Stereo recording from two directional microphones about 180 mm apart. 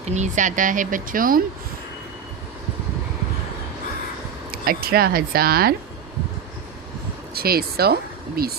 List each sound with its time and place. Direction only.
0.0 s speech: 40° right (ahead or behind)
4.6 s speech: 55° right (ahead or behind)
7.3 s speech: 60° right (ahead or behind)